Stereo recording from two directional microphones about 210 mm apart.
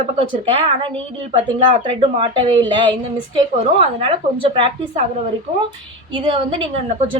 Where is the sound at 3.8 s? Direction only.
25° right (ahead or behind).